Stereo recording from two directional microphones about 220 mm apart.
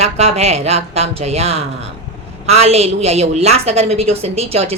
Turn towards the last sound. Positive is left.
turn(degrees=-30)  # may be behind; listen again after turning